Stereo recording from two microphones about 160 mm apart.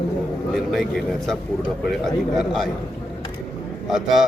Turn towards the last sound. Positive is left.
turn(degrees=0)  # may be behind; listen again after turning